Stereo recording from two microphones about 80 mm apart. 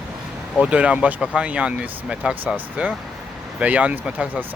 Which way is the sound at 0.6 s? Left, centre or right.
Centre.